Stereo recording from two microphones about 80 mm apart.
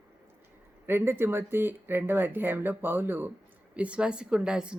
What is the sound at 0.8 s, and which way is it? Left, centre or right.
A woman's voice, right.